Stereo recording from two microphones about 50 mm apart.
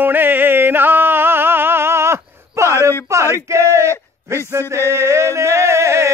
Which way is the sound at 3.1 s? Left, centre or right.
Right.